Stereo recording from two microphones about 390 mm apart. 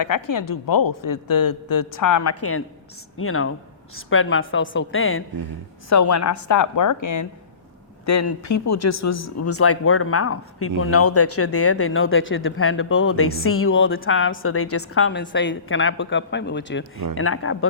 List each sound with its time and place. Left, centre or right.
0.0 s speech: left
5.9 s speech: left